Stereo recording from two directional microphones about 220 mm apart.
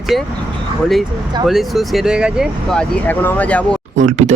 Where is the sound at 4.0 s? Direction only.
30° right (ahead or behind).